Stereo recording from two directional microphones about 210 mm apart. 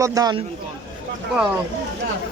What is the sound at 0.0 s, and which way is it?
Speech, 15° right (ahead or behind).